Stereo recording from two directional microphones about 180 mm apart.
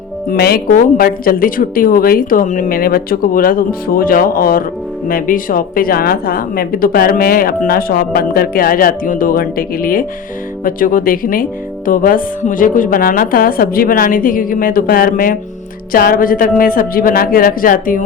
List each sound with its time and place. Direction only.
0.3 s a woman's voice: 60° left (ahead or behind)